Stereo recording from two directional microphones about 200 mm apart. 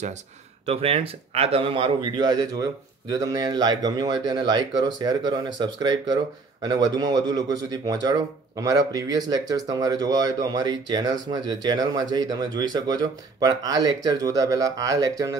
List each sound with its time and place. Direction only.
0.7 s speech: 30° right (ahead or behind)